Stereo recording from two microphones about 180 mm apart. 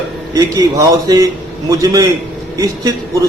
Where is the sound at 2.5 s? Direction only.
20° right (ahead or behind).